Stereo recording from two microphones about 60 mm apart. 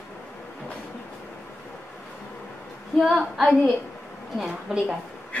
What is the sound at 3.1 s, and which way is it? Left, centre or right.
Female singing, centre.